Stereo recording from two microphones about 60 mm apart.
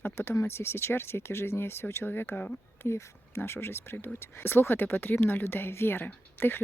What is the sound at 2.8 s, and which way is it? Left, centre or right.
Speech, left.